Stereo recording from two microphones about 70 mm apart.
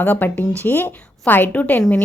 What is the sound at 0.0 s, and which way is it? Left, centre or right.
A woman's voice, left.